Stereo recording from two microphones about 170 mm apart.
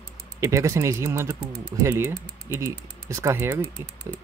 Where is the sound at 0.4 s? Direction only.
15° right (ahead or behind).